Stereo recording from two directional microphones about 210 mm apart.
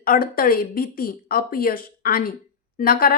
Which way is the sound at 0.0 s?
45° left (ahead or behind).